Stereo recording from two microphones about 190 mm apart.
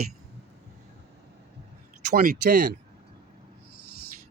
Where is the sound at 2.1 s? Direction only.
55° right (ahead or behind).